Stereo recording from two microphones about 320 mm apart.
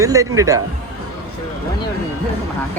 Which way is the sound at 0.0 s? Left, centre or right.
Centre.